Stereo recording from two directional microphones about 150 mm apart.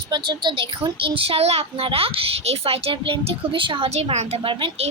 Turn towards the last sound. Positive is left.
turn(degrees=-35)  # may be behind; listen again after turning